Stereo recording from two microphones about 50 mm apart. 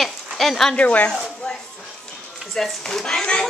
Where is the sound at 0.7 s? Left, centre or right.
Left.